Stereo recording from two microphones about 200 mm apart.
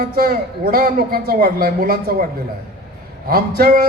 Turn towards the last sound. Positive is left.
turn(degrees=-50)  # may be behind; listen again after turning